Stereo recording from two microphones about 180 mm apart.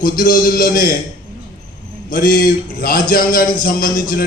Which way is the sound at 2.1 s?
50° left (ahead or behind).